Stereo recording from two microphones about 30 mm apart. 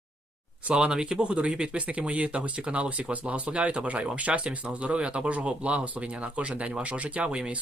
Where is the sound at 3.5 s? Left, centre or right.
Right.